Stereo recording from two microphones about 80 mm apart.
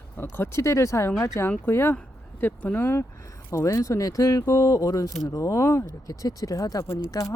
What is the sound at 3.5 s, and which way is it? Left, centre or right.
Speech, left.